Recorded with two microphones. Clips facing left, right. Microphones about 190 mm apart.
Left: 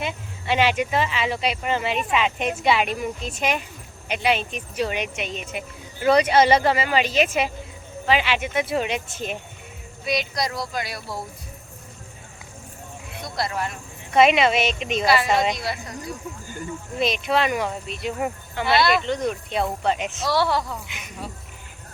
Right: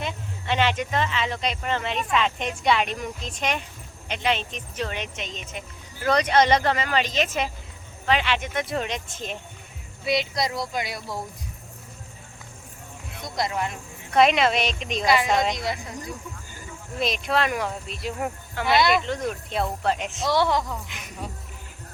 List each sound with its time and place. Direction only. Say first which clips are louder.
0.0 s speech: left 2 dB; 10° left (ahead or behind)
10.0 s speech: right 1 dB; 25° right (ahead or behind)
13.2 s speech: even; 20° right (ahead or behind)
14.1 s speech: left 2 dB; centre (ahead or behind)
15.0 s speech: left 1 dB; 20° right (ahead or behind)
15.3 s speech: left 2 dB; centre (ahead or behind)
15.5 s speech: even; 20° right (ahead or behind)
17.0 s speech: left 2 dB; centre (ahead or behind)
20.2 s speech: even; 20° right (ahead or behind)
20.7 s speech: even; 5° left (ahead or behind)